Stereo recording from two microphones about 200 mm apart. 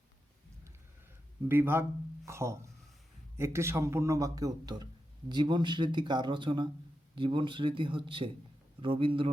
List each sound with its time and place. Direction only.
1.5 s speech: 10° right (ahead or behind); by 9.3 s 25° right (ahead or behind)